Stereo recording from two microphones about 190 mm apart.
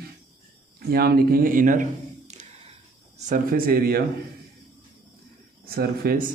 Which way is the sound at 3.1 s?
40° right (ahead or behind).